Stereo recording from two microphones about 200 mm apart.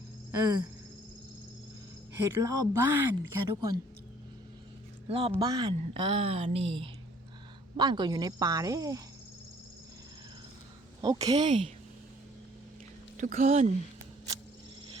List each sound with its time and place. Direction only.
0.3 s a sound: 15° right (ahead or behind)
2.2 s speech: 15° right (ahead or behind)
5.0 s a woman's voice: 30° right (ahead or behind)
11.0 s a woman's voice: 20° right (ahead or behind)
13.1 s speech: 40° right (ahead or behind)